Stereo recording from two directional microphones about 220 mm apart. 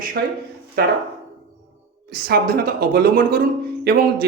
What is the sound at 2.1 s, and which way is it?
A woman's voice, 45° right (ahead or behind).